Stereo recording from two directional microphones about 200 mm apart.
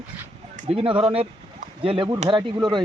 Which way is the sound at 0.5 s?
30° right (ahead or behind).